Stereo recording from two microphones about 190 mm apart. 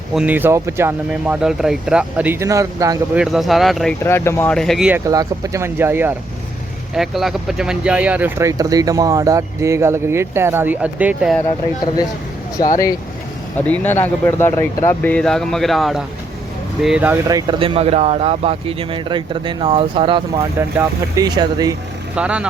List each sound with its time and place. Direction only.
0.1 s speech: 5° right (ahead or behind)
3.2 s speech: centre (ahead or behind)
4.0 s speech: 15° left (ahead or behind); by 11.3 s 5° right (ahead or behind)
13.6 s speech: 10° left (ahead or behind); by 17.7 s 20° right (ahead or behind)
17.7 s speech: 30° right (ahead or behind)
20.6 s speech: 15° right (ahead or behind)
22.1 s speech: 5° right (ahead or behind)